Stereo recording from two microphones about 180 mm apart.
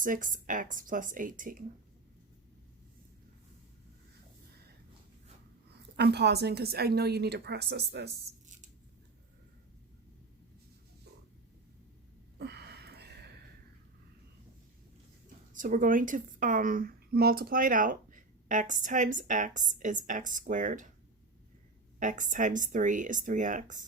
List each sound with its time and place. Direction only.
0.0 s a woman's voice: 45° right (ahead or behind)
6.0 s a woman's voice: 65° right (ahead or behind)
12.4 s a sound: 65° right (ahead or behind)
15.5 s a woman's voice: 45° right (ahead or behind)
21.9 s a woman's voice: 45° right (ahead or behind)